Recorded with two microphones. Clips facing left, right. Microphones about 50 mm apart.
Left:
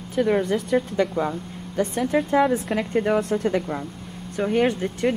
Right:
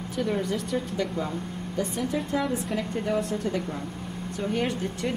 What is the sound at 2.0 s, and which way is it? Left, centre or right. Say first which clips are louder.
Speech: left 9 dB; left.